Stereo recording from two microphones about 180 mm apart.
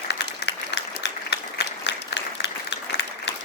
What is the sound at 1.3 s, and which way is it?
Applause, 70° left (ahead or behind).